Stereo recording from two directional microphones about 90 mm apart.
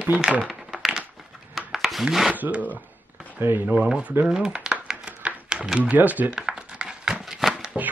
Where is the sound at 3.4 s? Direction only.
20° right (ahead or behind).